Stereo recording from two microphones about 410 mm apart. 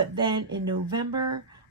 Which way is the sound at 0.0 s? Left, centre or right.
Centre.